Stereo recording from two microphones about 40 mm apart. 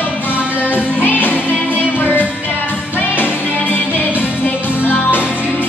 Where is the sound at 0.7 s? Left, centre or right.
Left.